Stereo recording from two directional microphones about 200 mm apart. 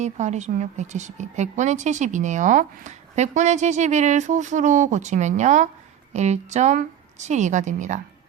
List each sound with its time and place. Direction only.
0.0 s a woman's voice: 35° right (ahead or behind)